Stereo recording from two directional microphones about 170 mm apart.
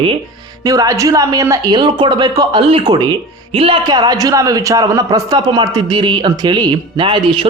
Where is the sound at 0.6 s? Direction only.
20° right (ahead or behind).